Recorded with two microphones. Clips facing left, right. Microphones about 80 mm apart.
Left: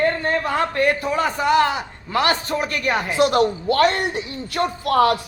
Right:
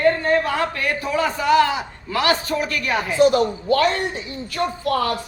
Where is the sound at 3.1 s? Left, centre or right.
Left.